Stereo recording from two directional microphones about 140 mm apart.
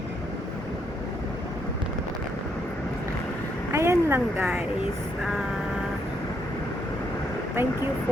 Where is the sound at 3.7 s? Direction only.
20° right (ahead or behind).